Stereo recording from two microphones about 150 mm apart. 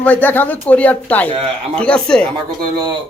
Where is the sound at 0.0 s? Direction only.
10° left (ahead or behind).